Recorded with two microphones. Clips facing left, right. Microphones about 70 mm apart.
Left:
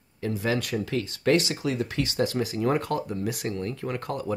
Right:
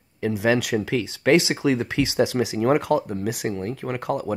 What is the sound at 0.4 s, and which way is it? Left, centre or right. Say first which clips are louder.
Speech: right 7 dB; right.